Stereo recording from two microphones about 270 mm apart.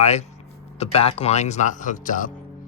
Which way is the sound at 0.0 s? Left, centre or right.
Left.